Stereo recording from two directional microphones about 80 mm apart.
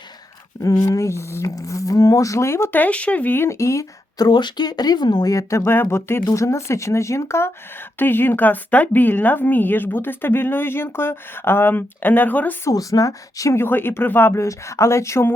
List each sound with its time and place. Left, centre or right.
0.6 s speech: left
2.7 s a woman's voice: centre; by 3.8 s left
4.2 s speech: left
5.3 s a woman's voice: left
12.7 s a woman's voice: left
13.6 s a woman's voice: left
14.4 s speech: left